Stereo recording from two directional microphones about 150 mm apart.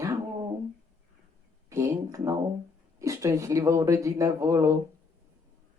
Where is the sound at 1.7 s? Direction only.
20° right (ahead or behind).